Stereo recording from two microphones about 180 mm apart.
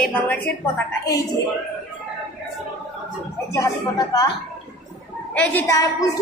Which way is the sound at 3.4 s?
20° left (ahead or behind).